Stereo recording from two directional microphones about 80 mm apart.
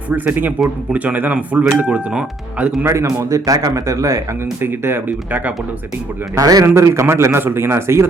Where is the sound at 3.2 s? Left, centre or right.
Right.